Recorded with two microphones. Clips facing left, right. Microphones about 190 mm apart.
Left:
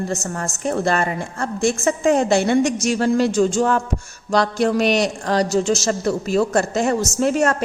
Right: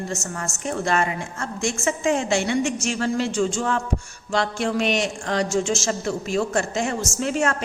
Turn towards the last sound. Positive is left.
turn(degrees=40)  # may be behind; listen again after turning